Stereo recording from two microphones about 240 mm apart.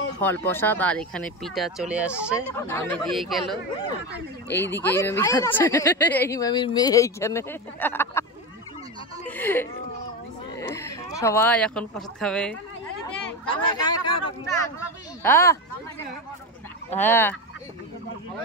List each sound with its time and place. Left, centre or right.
0.2 s speech: centre
2.5 s speech: centre
9.2 s a sound: centre
10.7 s speech: centre
13.5 s speech: centre
16.9 s speech: centre